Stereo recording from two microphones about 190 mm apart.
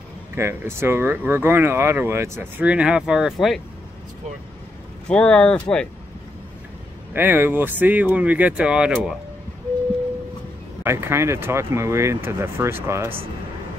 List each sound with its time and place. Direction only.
0.4 s speech: 15° right (ahead or behind)
5.0 s speech: 5° left (ahead or behind)
7.2 s speech: 10° right (ahead or behind)
10.8 s speech: 15° right (ahead or behind)